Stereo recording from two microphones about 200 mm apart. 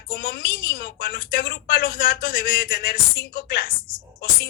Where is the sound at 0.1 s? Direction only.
45° left (ahead or behind).